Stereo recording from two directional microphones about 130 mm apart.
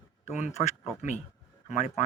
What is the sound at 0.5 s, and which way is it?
Speech, 60° left (ahead or behind).